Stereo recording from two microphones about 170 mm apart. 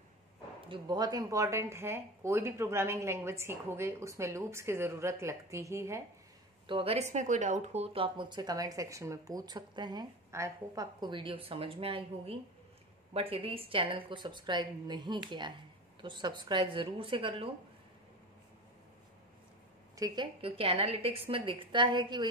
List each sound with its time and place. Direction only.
0.7 s speech: 25° right (ahead or behind)
6.7 s speech: 35° right (ahead or behind)
20.0 s a woman's voice: 30° right (ahead or behind)